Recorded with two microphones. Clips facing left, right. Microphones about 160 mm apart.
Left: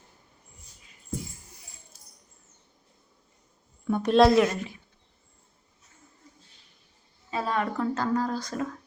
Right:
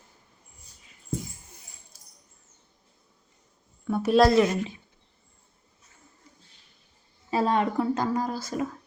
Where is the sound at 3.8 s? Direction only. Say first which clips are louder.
Even; 5° right (ahead or behind).